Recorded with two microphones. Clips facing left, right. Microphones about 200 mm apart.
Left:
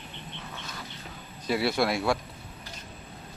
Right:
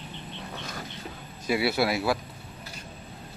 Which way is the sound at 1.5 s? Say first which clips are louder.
Right 1 dB; 5° right (ahead or behind).